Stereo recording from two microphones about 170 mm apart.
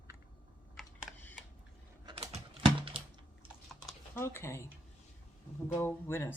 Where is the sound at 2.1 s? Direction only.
30° right (ahead or behind).